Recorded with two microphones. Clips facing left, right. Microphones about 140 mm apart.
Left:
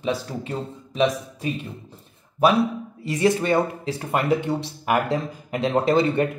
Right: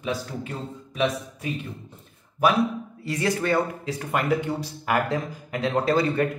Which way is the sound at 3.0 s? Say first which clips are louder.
Left 5 dB; 20° left (ahead or behind).